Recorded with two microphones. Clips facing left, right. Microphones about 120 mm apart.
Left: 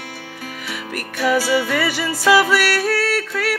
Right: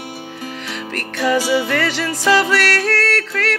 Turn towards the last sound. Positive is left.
turn(degrees=10)  # may be behind; listen again after turning